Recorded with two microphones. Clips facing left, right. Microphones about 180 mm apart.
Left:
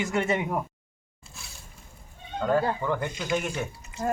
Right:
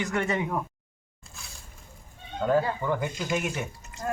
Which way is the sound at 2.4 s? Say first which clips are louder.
Even; 5° right (ahead or behind).